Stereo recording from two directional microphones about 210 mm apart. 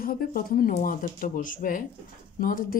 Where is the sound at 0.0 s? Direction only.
45° left (ahead or behind).